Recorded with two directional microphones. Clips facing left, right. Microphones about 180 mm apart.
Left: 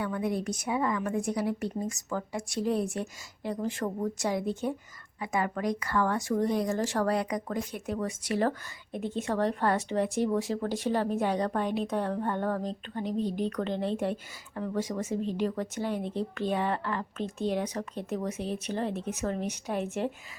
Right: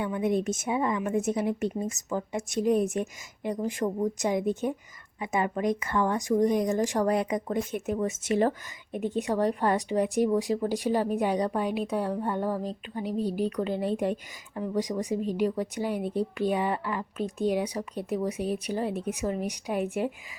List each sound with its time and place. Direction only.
0.0 s a woman's voice: 20° right (ahead or behind)